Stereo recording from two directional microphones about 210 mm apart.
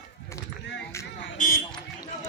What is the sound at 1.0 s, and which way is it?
Vehicle, 15° left (ahead or behind).